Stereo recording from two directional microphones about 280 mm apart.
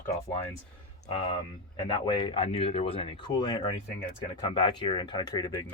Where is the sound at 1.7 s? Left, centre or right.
Centre.